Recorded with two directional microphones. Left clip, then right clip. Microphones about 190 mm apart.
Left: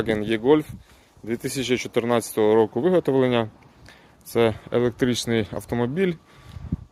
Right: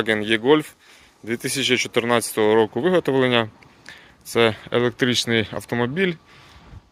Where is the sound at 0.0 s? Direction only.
5° left (ahead or behind).